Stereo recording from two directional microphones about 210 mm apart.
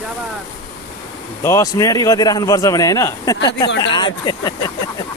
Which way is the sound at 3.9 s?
20° left (ahead or behind).